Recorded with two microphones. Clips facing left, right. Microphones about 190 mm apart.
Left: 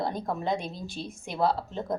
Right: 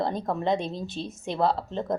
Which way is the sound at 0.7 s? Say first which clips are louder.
Right 4 dB; 25° right (ahead or behind).